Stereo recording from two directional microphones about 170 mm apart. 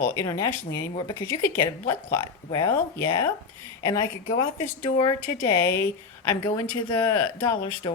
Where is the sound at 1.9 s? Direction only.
20° left (ahead or behind).